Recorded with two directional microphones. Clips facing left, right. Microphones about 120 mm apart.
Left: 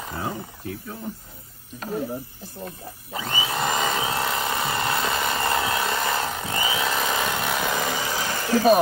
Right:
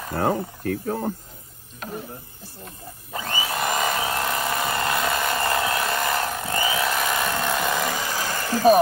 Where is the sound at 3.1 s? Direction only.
20° left (ahead or behind).